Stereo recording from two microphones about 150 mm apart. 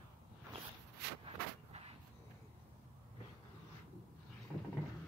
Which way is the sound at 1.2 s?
40° right (ahead or behind).